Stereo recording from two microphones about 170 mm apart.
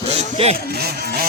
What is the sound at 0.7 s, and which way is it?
Speech, 65° right (ahead or behind).